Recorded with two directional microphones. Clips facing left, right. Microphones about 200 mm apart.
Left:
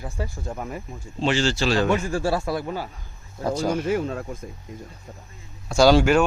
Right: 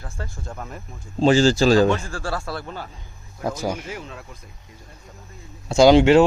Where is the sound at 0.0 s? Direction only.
15° left (ahead or behind).